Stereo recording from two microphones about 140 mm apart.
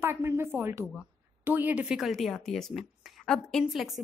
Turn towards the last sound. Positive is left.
turn(degrees=0)  # may be behind; listen again after turning